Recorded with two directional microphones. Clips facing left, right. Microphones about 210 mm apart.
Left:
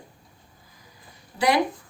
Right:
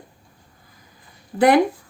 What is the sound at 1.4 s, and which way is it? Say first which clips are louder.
Speech: right 7 dB; 55° right (ahead or behind).